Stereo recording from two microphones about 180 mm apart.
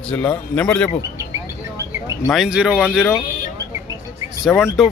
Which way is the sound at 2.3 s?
Centre (ahead or behind).